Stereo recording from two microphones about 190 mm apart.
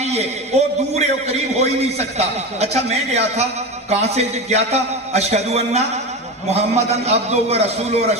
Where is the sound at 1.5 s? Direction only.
35° right (ahead or behind).